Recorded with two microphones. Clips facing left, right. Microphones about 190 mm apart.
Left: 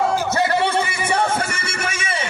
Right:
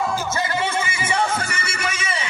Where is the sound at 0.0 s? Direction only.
60° left (ahead or behind).